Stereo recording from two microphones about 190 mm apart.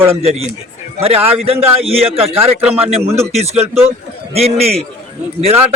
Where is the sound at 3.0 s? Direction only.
15° right (ahead or behind).